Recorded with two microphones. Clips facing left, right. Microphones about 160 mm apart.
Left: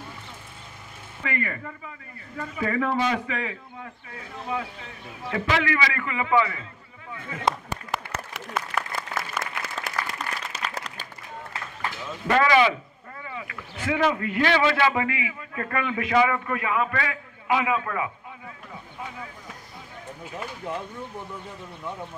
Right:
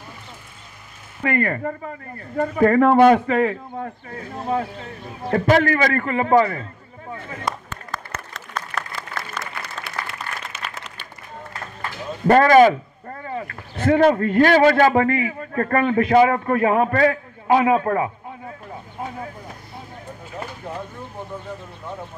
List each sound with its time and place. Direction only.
1.2 s speech: 50° right (ahead or behind)
7.7 s applause: 10° left (ahead or behind)
9.4 s applause: 45° left (ahead or behind)
12.3 s speech: 45° right (ahead or behind)